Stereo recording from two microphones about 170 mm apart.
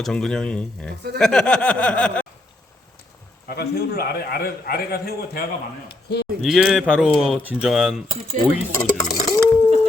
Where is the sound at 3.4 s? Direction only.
70° left (ahead or behind).